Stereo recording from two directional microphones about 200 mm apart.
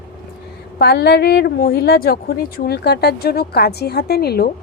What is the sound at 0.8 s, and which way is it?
A woman's voice, 55° left (ahead or behind).